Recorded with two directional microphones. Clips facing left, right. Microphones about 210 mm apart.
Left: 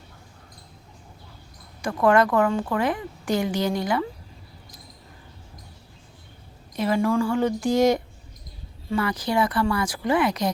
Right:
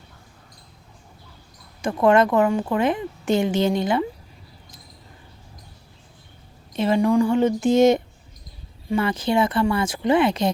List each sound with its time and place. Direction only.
1.8 s a woman's voice: 20° right (ahead or behind)
6.7 s a woman's voice: 25° right (ahead or behind)